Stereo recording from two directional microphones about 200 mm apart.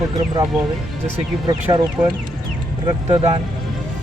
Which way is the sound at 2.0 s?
20° right (ahead or behind).